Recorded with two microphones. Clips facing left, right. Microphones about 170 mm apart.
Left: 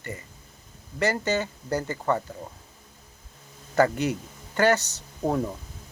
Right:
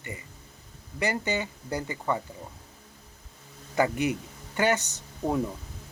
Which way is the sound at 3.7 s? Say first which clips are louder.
Left 3 dB; 15° right (ahead or behind).